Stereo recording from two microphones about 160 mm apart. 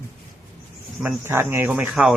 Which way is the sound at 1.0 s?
15° right (ahead or behind).